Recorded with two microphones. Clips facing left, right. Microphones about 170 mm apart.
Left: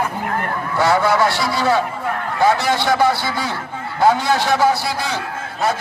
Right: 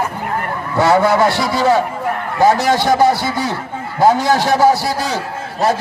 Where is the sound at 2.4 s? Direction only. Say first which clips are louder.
Right 4 dB; 40° right (ahead or behind).